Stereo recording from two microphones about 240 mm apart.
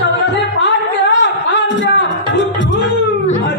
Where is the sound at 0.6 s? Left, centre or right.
Left.